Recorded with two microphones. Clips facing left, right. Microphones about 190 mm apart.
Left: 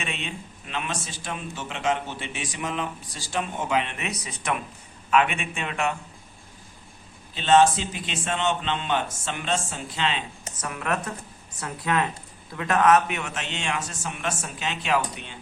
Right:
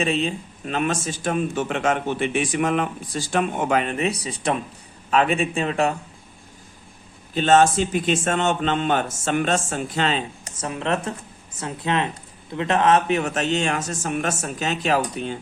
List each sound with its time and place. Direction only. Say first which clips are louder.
0.0 s a man's voice: right 11 dB; 35° right (ahead or behind)
7.3 s a man's voice: right 2 dB; 45° right (ahead or behind)
10.6 s a man's voice: right 4 dB; 25° right (ahead or behind)